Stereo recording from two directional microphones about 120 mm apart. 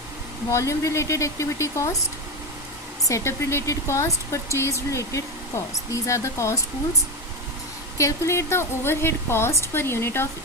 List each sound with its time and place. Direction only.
0.5 s speech: 25° left (ahead or behind)
3.1 s speech: 25° left (ahead or behind)
7.9 s speech: 25° left (ahead or behind)